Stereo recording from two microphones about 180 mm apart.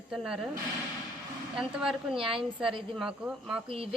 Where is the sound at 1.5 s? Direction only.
5° right (ahead or behind).